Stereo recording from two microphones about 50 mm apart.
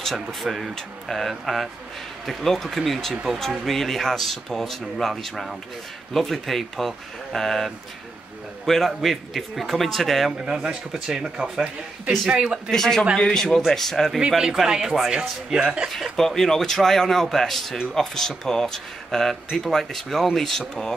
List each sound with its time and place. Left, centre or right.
0.0 s speech: centre
10.3 s a man's voice: centre
12.7 s a man's voice: centre
14.4 s speech: centre
15.9 s a man's voice: centre